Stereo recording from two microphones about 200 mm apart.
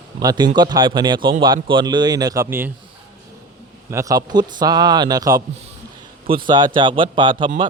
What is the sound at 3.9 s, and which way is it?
Speech, 15° right (ahead or behind).